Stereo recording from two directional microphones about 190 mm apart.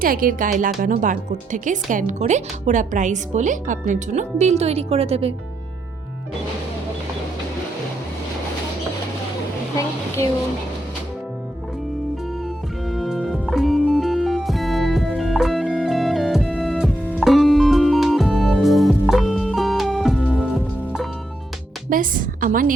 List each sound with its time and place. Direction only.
0.0 s speech: 50° right (ahead or behind); by 5.3 s 30° right (ahead or behind)
12.9 s music: centre (ahead or behind)
21.8 s a woman's voice: 45° right (ahead or behind)